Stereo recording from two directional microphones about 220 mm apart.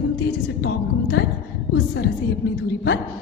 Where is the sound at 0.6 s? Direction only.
50° left (ahead or behind).